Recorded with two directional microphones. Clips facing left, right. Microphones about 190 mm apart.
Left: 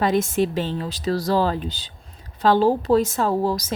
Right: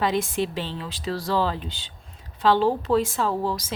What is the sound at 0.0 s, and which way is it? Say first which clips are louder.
A woman's voice: left 4 dB; 45° left (ahead or behind).